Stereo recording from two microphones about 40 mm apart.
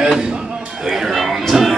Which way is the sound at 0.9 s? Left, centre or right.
Centre.